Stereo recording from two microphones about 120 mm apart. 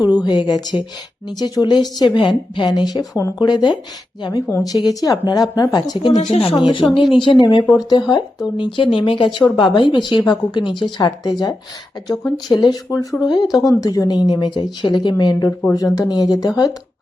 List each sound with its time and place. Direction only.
0.0 s speech: 35° left (ahead or behind)
4.4 s speech: 25° left (ahead or behind)